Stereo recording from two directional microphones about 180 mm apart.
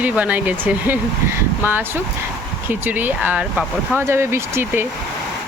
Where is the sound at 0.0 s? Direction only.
10° right (ahead or behind).